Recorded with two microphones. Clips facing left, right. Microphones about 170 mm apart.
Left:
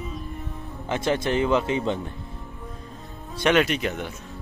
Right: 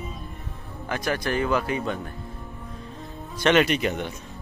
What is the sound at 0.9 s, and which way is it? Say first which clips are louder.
Speech: left 3 dB; 25° left (ahead or behind).